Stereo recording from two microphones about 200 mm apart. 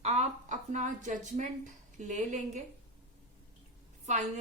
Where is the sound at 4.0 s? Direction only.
35° right (ahead or behind).